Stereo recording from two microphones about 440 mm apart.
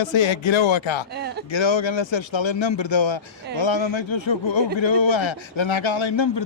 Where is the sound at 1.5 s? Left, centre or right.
Left.